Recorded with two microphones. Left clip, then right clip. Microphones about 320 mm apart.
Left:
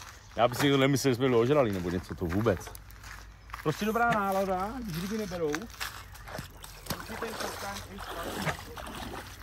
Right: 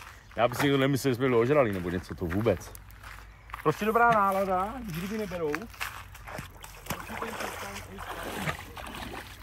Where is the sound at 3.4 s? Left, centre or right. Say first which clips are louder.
Right 4 dB; centre.